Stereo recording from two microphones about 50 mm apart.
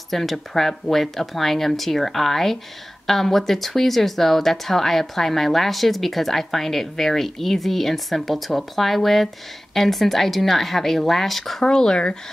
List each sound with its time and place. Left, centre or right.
0.1 s speech: centre
11.6 s speech: centre